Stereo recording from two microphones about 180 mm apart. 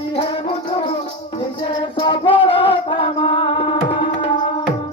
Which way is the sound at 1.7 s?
25° left (ahead or behind).